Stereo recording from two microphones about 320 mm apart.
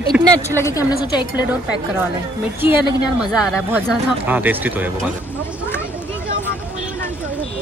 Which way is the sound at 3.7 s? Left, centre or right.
Centre.